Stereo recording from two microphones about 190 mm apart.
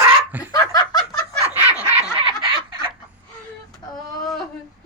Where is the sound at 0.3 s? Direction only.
10° right (ahead or behind).